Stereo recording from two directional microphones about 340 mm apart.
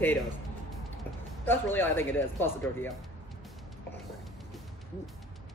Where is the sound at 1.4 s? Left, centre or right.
Centre.